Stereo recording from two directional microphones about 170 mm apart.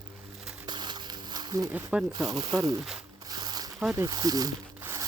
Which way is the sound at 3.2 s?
25° right (ahead or behind).